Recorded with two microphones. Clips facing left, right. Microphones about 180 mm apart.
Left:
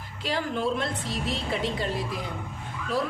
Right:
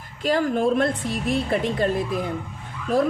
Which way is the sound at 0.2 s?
50° right (ahead or behind).